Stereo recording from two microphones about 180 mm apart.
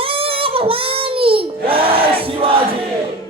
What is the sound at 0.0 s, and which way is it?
Child singing, 30° right (ahead or behind).